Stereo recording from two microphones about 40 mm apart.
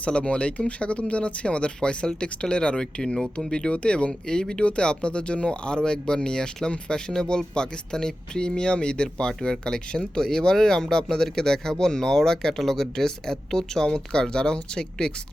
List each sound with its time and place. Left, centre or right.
0.0 s speech: left